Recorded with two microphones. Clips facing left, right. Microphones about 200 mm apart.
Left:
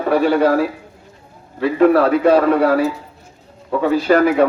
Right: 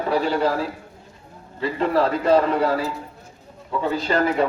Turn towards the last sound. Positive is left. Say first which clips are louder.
# left 7 dB
turn(degrees=65)  # may be behind; listen again after turning